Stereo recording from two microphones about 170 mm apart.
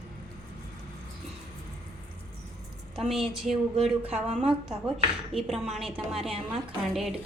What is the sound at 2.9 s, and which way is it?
A woman's voice, 5° right (ahead or behind).